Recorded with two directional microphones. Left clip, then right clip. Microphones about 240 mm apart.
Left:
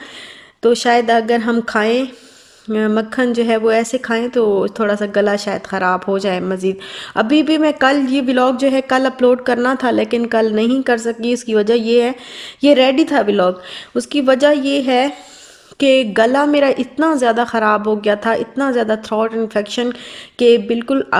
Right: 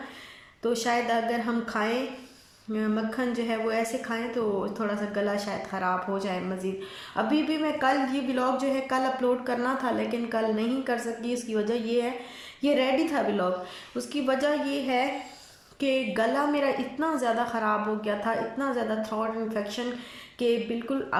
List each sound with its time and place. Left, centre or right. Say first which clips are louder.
0.6 s speech: left 14 dB; left